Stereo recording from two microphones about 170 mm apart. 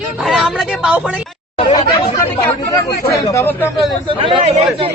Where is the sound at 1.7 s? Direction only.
20° left (ahead or behind).